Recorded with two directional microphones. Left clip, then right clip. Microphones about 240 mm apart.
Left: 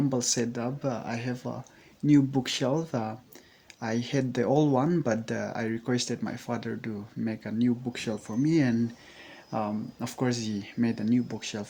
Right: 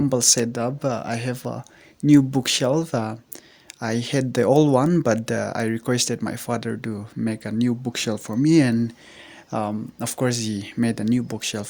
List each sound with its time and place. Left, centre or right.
0.1 s speech: right